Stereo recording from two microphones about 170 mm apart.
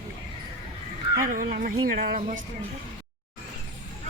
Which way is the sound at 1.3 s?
55° right (ahead or behind).